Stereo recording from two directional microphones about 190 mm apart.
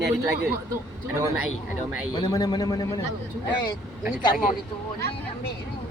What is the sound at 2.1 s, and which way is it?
Speech, 20° left (ahead or behind).